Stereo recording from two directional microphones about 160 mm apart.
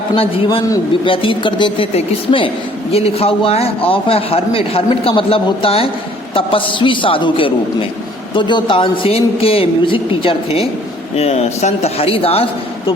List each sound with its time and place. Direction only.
0.2 s speech: 35° left (ahead or behind)